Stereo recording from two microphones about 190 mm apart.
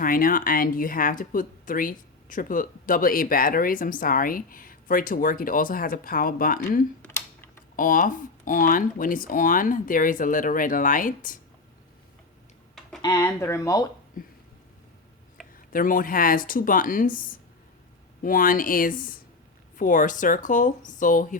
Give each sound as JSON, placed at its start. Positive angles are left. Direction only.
{"t": 0.0, "sound": "speech", "side_deg": 45}
{"t": 13.0, "sound": "speech", "side_deg": 20}
{"t": 14.2, "sound": "speech", "side_deg": 45}
{"t": 15.7, "sound": "speech", "side_deg": 45}